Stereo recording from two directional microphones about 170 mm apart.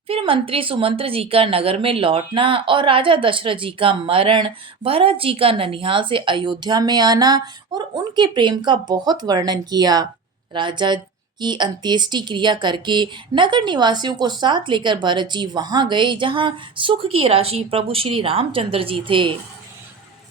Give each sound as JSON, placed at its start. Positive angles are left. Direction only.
{"t": 0.1, "sound": "a woman's voice", "side_deg": -35}